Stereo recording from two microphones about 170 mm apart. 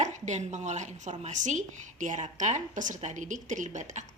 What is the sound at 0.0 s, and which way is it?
A woman's voice, 45° right (ahead or behind).